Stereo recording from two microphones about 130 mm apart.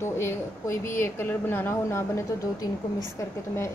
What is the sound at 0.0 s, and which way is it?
A woman's voice, 20° left (ahead or behind).